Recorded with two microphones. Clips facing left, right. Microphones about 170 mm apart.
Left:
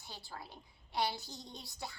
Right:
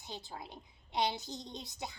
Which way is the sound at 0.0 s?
20° right (ahead or behind).